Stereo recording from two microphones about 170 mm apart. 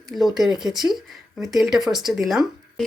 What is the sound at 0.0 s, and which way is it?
Speech, centre (ahead or behind).